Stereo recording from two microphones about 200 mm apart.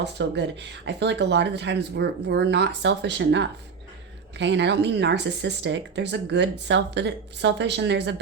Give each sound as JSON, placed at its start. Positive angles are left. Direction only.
{"t": 0.0, "sound": "speech", "side_deg": -60}